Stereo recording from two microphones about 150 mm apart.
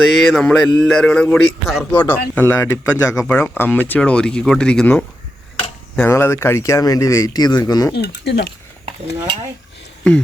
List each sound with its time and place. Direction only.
0.0 s speech: centre (ahead or behind)
2.0 s speech: 15° left (ahead or behind)
7.9 s speech: 90° left